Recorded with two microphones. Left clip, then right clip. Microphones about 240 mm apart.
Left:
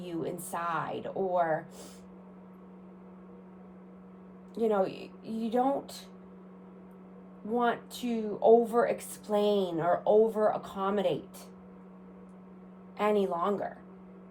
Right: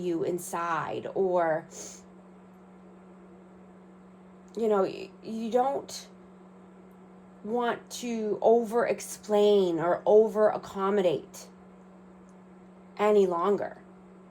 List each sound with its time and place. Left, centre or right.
0.0 s a woman's voice: right
4.5 s a woman's voice: right
7.5 s a woman's voice: right
13.0 s a woman's voice: right